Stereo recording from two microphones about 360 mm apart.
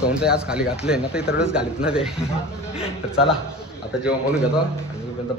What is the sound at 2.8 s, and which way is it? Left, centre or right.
Speech, centre.